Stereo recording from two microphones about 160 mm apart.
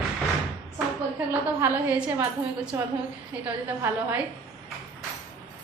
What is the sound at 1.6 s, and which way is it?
A woman's voice, 10° right (ahead or behind).